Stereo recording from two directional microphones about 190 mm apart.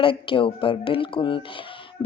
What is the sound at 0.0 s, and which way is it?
A woman's voice, 30° left (ahead or behind).